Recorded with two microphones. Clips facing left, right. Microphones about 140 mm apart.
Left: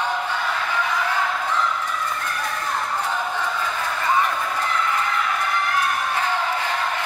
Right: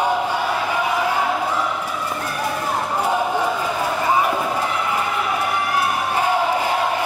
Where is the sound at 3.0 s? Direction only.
15° right (ahead or behind).